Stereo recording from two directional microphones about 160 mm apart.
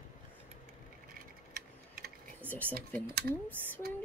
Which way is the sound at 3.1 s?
90° right.